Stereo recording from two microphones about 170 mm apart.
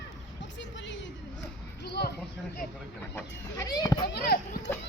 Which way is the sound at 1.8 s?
70° left (ahead or behind).